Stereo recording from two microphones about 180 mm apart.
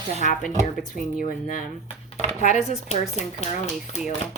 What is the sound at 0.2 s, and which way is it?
A woman's voice, 45° left (ahead or behind).